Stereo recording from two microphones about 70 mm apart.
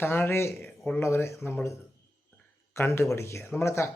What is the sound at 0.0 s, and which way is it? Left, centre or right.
Speech, left.